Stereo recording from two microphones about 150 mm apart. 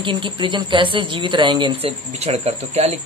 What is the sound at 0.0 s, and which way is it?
A man's voice, 35° right (ahead or behind).